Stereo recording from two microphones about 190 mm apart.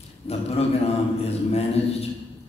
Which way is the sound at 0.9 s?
35° left (ahead or behind).